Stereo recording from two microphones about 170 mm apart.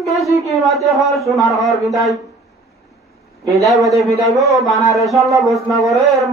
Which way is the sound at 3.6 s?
Centre (ahead or behind).